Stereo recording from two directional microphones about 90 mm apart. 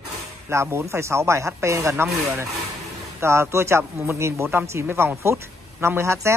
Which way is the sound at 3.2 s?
30° right (ahead or behind).